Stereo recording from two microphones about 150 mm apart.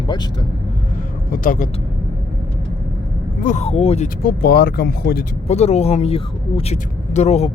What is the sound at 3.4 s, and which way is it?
Speech, 50° left (ahead or behind).